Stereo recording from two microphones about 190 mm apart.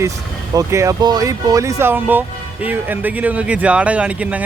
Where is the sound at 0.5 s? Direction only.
15° right (ahead or behind).